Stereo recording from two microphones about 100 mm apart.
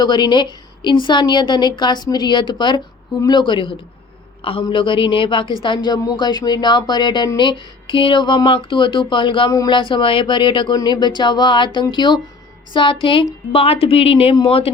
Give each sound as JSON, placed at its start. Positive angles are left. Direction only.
{"t": 0.0, "sound": "a woman's voice", "side_deg": 45}
{"t": 13.5, "sound": "a woman's voice", "side_deg": 75}